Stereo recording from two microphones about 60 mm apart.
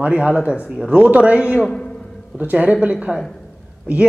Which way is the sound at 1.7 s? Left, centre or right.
Centre.